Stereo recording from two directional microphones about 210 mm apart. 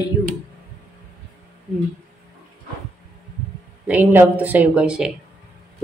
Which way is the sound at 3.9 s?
10° right (ahead or behind).